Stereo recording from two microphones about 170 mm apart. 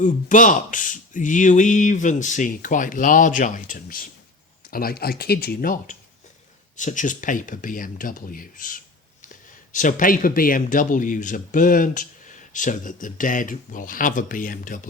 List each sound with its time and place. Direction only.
0.0 s speech: 50° left (ahead or behind)
4.7 s speech: 60° left (ahead or behind)